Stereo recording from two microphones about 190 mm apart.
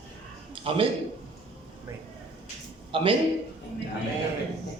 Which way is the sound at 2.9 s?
30° right (ahead or behind).